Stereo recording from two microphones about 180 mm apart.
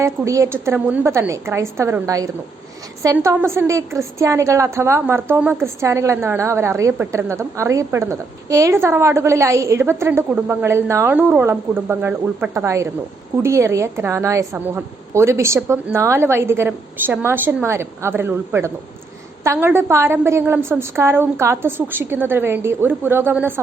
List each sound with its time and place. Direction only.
0.0 s a woman's voice: 15° right (ahead or behind)